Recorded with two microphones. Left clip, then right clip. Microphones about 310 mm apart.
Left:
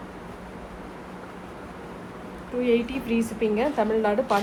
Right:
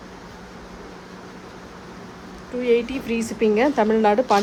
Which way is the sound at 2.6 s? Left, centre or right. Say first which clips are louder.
Right 4 dB; right.